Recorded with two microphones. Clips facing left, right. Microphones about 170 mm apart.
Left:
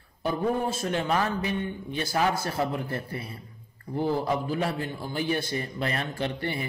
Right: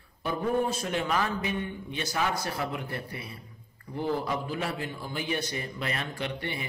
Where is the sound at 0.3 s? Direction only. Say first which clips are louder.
Left 1 dB; 30° left (ahead or behind).